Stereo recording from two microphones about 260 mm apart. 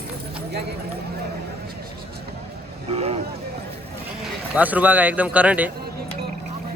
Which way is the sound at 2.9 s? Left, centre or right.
Right.